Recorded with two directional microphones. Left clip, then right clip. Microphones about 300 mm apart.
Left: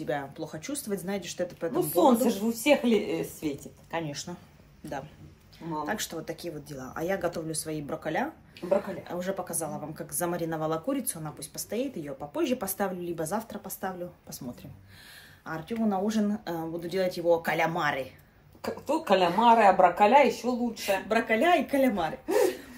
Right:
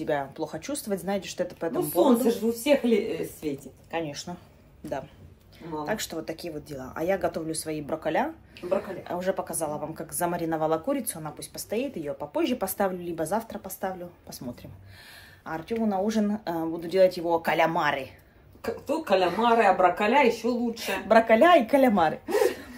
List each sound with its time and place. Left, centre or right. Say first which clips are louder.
0.0 s a woman's voice: right 4 dB; centre
2.2 s speech: right 1 dB; left
3.9 s a woman's voice: right 2 dB; centre
5.9 s a woman's voice: right 2 dB; centre
18.6 s speech: even; left; by 21.0 s centre
21.1 s speech: right 8 dB; right